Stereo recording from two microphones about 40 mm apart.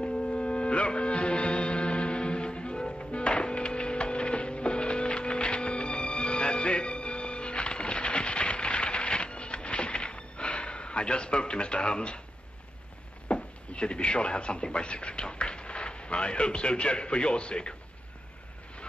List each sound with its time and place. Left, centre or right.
0.0 s music: left
13.3 s speech: left